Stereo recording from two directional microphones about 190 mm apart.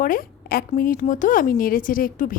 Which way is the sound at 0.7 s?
45° left (ahead or behind).